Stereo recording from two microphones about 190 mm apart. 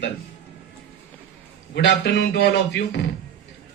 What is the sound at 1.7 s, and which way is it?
A man's voice, 65° left (ahead or behind).